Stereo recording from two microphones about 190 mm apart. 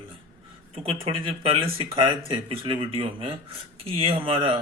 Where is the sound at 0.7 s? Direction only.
30° right (ahead or behind).